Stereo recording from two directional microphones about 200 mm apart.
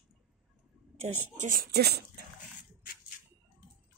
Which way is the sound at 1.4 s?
45° right (ahead or behind).